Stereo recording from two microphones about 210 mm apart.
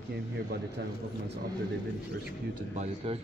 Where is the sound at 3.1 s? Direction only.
25° right (ahead or behind).